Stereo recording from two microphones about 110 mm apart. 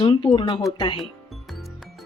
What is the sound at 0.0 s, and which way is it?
Speech, 45° left (ahead or behind).